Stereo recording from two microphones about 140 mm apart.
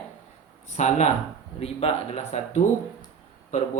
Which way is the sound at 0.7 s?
55° left (ahead or behind).